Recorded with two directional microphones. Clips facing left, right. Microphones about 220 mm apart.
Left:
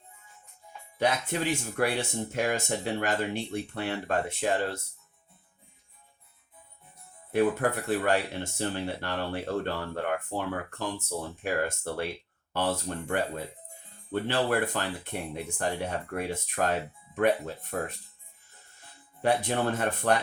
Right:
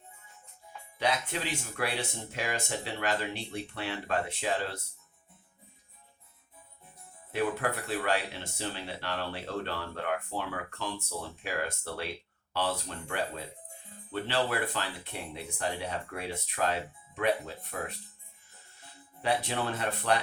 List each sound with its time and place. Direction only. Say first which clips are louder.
0.9 s speech: left 4 dB; 50° left (ahead or behind)
7.3 s speech: left 5 dB; 50° left (ahead or behind)
19.2 s speech: left 4 dB; 50° left (ahead or behind)